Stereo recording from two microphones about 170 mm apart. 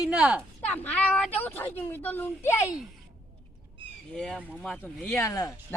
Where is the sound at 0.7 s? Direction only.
10° left (ahead or behind).